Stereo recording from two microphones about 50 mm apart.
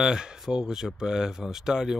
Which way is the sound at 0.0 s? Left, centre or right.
Centre.